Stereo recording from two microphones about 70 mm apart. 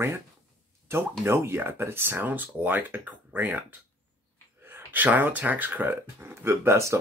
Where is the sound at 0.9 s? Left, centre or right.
Right.